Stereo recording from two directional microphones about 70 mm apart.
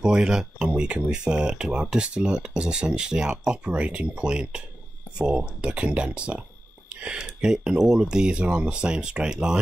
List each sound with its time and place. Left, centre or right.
0.0 s speech: centre